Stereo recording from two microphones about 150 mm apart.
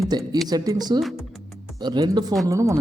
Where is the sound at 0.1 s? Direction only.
30° right (ahead or behind).